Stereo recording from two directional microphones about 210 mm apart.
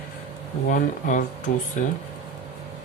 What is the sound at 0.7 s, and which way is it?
Speech, 35° left (ahead or behind).